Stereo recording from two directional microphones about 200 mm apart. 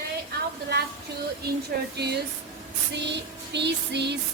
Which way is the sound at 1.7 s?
50° right (ahead or behind).